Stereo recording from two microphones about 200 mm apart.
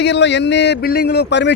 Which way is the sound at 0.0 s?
60° left (ahead or behind).